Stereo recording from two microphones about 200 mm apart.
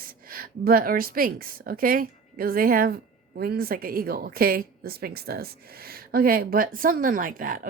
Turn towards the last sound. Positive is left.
turn(degrees=-45)  # may be behind; listen again after turning